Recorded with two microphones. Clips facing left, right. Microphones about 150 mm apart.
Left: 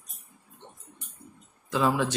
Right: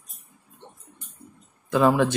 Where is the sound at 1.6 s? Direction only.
55° right (ahead or behind).